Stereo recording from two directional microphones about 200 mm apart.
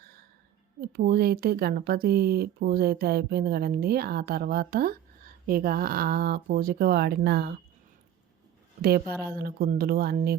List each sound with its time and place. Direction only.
0.9 s speech: 50° right (ahead or behind)
8.8 s speech: 50° right (ahead or behind)